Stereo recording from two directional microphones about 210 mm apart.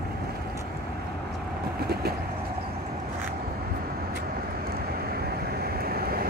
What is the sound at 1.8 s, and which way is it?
Bird, 50° right (ahead or behind).